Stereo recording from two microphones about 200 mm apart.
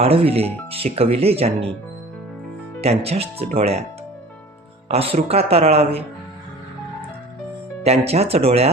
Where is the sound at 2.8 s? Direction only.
30° right (ahead or behind).